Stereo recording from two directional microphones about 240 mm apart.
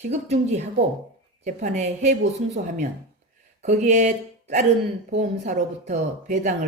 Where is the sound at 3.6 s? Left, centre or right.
Right.